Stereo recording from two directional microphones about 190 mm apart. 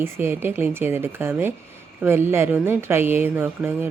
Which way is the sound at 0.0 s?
10° right (ahead or behind).